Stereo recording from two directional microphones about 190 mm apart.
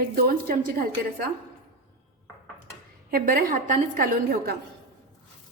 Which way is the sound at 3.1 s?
50° right (ahead or behind).